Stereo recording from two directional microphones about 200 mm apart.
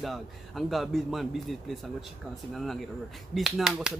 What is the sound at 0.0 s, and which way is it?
Speech, centre (ahead or behind).